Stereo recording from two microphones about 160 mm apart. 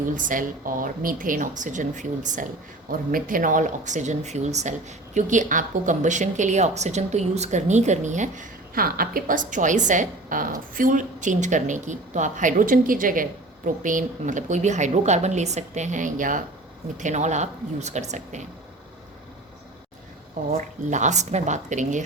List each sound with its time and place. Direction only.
0.0 s a woman's voice: 55° right (ahead or behind)
20.5 s a woman's voice: 50° right (ahead or behind)